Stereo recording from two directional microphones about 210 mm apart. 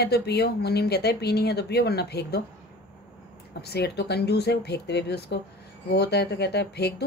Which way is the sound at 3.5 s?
50° left (ahead or behind).